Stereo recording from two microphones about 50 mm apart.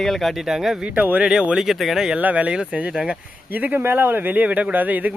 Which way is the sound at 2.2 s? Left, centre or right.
Right.